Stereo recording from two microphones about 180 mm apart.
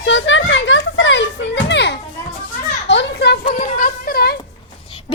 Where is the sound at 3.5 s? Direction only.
45° left (ahead or behind).